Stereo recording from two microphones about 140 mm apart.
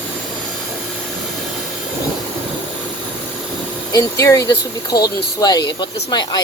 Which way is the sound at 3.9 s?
25° left (ahead or behind).